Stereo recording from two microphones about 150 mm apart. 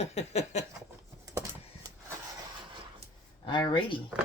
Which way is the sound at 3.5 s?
30° left (ahead or behind).